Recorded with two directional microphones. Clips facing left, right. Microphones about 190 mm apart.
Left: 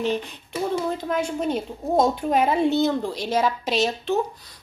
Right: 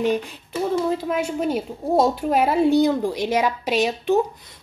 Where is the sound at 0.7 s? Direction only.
5° right (ahead or behind).